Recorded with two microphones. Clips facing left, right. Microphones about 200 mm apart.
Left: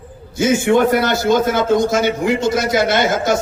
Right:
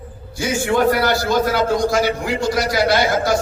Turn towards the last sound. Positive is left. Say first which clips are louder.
# left 1 dB
turn(degrees=20)  # may be behind; listen again after turning